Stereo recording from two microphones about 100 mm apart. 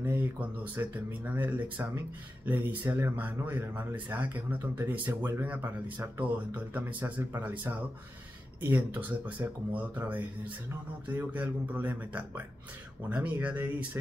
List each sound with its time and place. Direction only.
0.0 s speech: 20° right (ahead or behind)